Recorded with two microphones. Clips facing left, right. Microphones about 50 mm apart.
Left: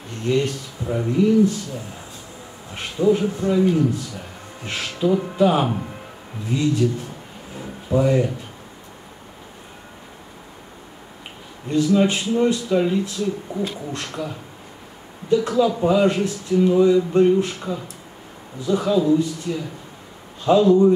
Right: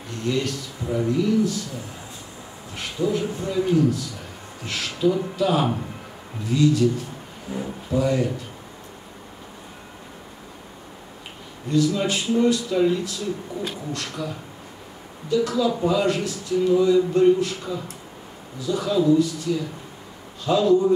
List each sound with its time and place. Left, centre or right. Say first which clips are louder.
0.2 s speech: left 4 dB; left
2.7 s speech: left 5 dB; left
7.9 s speech: left 4 dB; left
11.7 s speech: left 3 dB; left
14.2 s speech: left 1 dB; left